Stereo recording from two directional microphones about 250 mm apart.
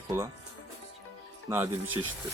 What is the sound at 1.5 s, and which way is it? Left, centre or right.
Speech, centre.